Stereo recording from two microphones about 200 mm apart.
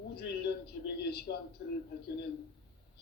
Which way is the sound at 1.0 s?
55° left (ahead or behind).